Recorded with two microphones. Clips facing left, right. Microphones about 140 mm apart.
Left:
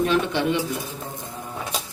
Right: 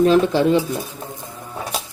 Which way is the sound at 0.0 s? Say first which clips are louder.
Right 7 dB; 35° right (ahead or behind).